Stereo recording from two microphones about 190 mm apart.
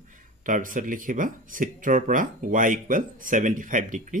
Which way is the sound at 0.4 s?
45° right (ahead or behind).